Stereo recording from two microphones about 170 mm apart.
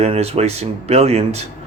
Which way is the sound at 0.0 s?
35° right (ahead or behind).